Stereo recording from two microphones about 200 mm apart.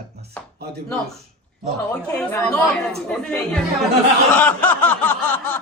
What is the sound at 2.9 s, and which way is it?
Speech, 5° left (ahead or behind).